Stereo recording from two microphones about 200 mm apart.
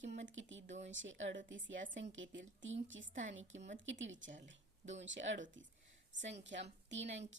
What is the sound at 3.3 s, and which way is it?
A woman's voice, 70° right (ahead or behind).